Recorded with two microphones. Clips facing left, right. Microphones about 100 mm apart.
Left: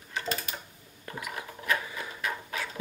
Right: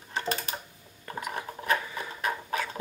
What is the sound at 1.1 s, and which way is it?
Filing, 35° right (ahead or behind).